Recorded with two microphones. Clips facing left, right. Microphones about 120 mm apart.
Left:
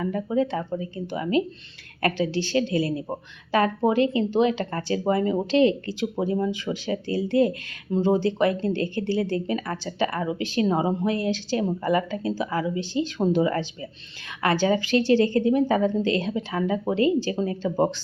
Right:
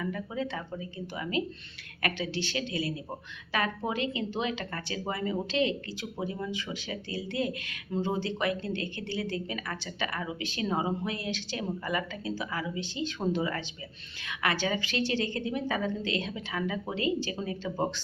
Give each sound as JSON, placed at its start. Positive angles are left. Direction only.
{"t": 0.0, "sound": "speech", "side_deg": 35}